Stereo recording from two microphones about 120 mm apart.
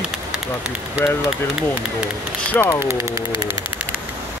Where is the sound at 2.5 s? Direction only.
20° left (ahead or behind).